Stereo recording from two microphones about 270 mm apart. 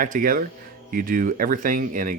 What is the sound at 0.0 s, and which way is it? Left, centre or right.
Speech, right.